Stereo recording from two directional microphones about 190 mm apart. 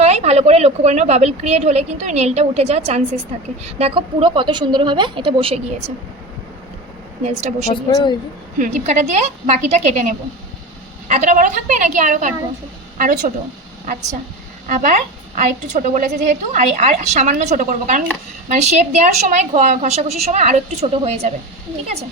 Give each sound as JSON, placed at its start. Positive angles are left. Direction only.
{"t": 0.0, "sound": "a woman's voice", "side_deg": -35}
{"t": 7.3, "sound": "a woman's voice", "side_deg": -35}
{"t": 7.9, "sound": "speech", "side_deg": 20}
{"t": 8.5, "sound": "a woman's voice", "side_deg": -40}
{"t": 14.7, "sound": "a woman's voice", "side_deg": -40}